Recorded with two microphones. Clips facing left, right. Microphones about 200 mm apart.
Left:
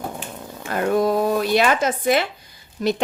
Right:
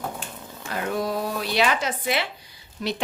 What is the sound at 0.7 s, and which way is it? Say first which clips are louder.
A woman's voice: left 7 dB; 50° left (ahead or behind).